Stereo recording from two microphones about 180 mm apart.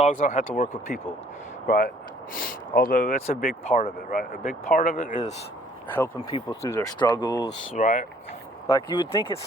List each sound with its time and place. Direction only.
0.0 s speech: 45° left (ahead or behind)
4.1 s speech: 45° left (ahead or behind)
6.3 s speech: 20° left (ahead or behind)
7.0 s speech: 25° left (ahead or behind)
7.8 s speech: 45° left (ahead or behind)
8.6 s speech: 20° left (ahead or behind)